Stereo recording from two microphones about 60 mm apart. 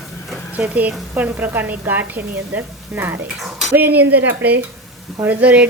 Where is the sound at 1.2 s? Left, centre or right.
Right.